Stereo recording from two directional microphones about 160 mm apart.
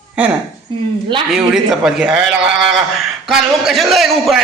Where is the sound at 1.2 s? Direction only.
5° right (ahead or behind).